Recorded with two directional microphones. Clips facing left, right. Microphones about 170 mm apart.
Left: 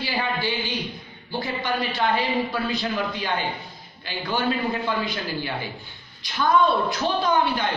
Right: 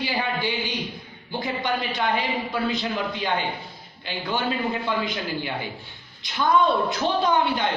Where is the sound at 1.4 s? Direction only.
20° right (ahead or behind).